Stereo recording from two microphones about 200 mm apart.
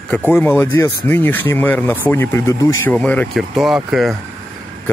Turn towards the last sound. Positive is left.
turn(degrees=0)  # may be behind; listen again after turning